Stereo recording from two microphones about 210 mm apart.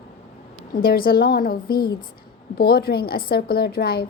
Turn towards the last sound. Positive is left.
turn(degrees=45)  # may be behind; listen again after turning